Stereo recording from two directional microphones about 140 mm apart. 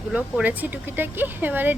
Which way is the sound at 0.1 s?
10° right (ahead or behind).